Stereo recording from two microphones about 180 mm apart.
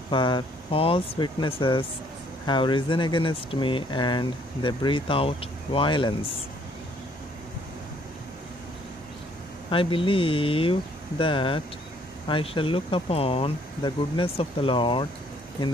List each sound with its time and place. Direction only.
0.1 s speech: 25° left (ahead or behind)
9.7 s speech: 30° left (ahead or behind)